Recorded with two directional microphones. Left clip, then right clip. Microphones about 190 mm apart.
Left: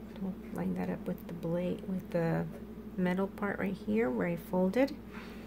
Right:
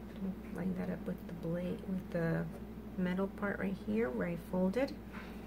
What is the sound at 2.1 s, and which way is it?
Speech, 40° left (ahead or behind).